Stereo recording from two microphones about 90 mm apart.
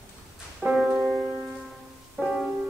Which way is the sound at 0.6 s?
5° right (ahead or behind).